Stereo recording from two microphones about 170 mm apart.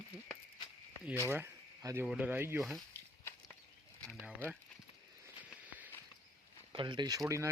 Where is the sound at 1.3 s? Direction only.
15° right (ahead or behind).